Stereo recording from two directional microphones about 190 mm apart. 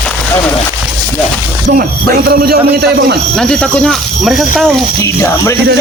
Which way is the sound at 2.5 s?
55° right (ahead or behind).